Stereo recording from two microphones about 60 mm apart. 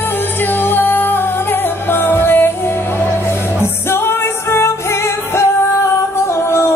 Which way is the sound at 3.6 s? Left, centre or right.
Left.